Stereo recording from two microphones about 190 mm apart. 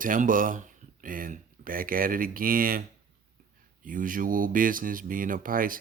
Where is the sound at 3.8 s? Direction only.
45° right (ahead or behind).